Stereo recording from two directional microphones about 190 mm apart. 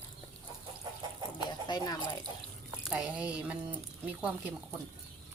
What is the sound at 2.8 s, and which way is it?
Speech, 5° right (ahead or behind).